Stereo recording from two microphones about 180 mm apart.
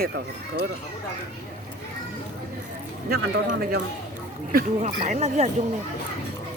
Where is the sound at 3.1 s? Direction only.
55° right (ahead or behind).